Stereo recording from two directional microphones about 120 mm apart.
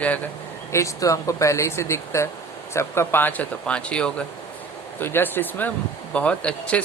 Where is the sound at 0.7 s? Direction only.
25° left (ahead or behind).